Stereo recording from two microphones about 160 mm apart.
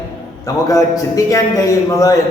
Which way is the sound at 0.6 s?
20° left (ahead or behind).